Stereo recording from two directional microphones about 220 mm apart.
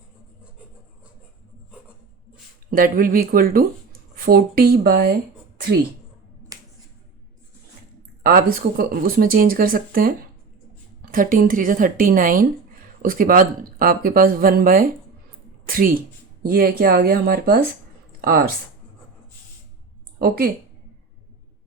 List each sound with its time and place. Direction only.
2.6 s speech: 40° right (ahead or behind)
6.5 s finger snapping: 15° right (ahead or behind)
8.2 s speech: 40° right (ahead or behind)
20.1 s speech: 45° right (ahead or behind)